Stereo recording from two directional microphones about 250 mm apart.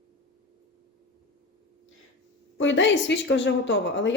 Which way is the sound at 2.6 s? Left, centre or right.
Left.